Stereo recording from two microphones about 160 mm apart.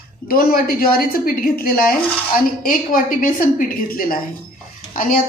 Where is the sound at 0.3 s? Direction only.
65° left (ahead or behind).